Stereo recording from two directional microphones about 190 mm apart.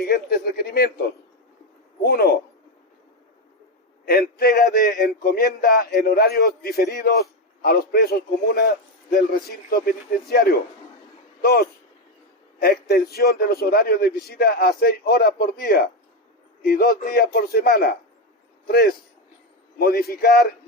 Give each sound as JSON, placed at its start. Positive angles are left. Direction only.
{"t": 0.0, "sound": "a man's voice", "side_deg": 55}
{"t": 2.0, "sound": "a man's voice", "side_deg": 50}
{"t": 4.0, "sound": "a man's voice", "side_deg": 50}
{"t": 11.4, "sound": "a man's voice", "side_deg": 55}